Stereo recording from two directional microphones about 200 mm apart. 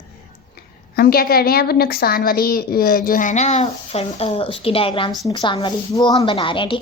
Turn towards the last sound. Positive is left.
turn(degrees=25)  # may be behind; listen again after turning